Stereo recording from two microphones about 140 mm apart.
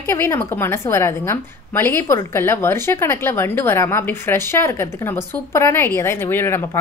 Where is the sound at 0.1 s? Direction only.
20° left (ahead or behind).